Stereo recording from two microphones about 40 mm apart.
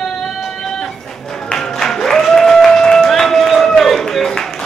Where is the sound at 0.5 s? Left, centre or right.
Centre.